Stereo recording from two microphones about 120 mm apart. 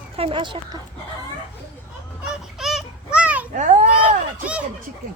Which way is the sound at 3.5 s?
90° right.